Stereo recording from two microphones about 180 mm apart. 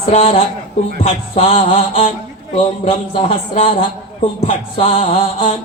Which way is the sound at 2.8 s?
30° left (ahead or behind).